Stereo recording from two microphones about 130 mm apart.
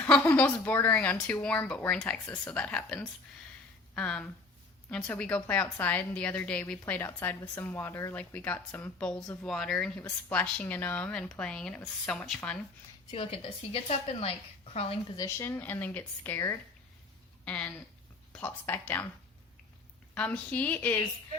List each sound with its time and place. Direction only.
0.0 s a woman's voice: 15° left (ahead or behind)
13.1 s a woman's voice: 45° left (ahead or behind)
15.1 s a woman's voice: 25° left (ahead or behind)
20.1 s a woman's voice: 10° left (ahead or behind)